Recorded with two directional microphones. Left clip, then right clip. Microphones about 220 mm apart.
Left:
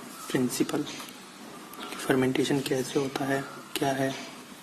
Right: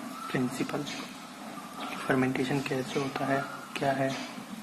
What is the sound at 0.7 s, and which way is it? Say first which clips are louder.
Speech: left 3 dB; 55° left (ahead or behind).